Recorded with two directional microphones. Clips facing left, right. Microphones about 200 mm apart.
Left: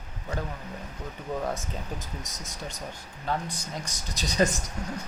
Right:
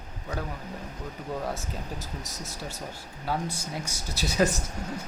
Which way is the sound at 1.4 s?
5° right (ahead or behind).